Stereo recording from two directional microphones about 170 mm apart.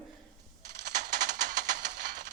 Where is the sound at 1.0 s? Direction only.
45° right (ahead or behind).